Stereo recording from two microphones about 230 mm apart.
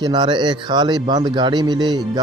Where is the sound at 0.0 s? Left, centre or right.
Centre.